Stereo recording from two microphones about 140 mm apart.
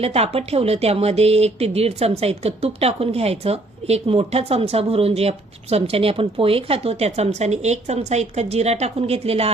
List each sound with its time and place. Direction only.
0.0 s speech: 45° right (ahead or behind)